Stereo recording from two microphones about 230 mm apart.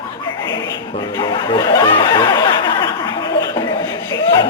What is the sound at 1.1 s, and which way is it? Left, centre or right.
Speech, centre.